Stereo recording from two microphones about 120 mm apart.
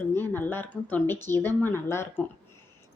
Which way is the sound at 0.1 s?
15° left (ahead or behind).